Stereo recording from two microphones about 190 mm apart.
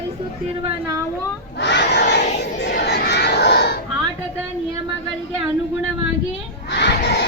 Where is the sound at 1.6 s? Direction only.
65° left (ahead or behind).